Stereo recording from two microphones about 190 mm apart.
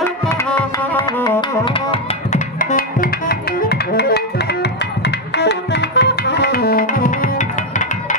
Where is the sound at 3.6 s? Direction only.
55° left (ahead or behind).